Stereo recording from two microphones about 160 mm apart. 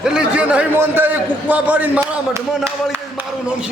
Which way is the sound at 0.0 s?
5° right (ahead or behind).